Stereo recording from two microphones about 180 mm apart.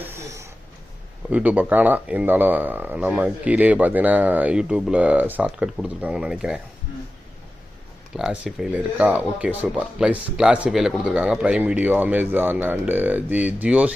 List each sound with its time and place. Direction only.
0.0 s a sound: 15° right (ahead or behind)
1.3 s speech: 10° right (ahead or behind)
8.1 s speech: 5° right (ahead or behind)